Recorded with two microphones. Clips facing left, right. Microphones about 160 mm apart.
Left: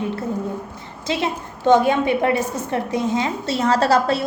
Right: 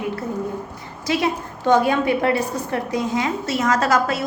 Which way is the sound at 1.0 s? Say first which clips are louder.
Right 2 dB; 25° left (ahead or behind).